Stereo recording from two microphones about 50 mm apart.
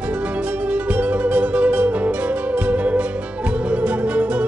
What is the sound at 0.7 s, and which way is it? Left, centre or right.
Music, right.